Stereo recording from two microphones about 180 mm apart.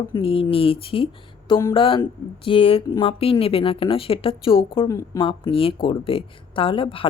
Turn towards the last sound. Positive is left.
turn(degrees=30)  # may be behind; listen again after turning